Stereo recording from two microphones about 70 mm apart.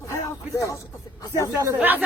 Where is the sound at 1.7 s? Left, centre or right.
Right.